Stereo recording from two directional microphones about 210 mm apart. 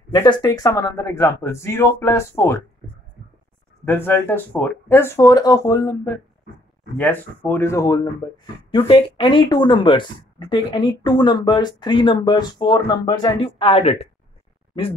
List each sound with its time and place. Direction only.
0.2 s speech: 20° left (ahead or behind)
3.8 s speech: 10° left (ahead or behind); by 14.0 s 30° left (ahead or behind)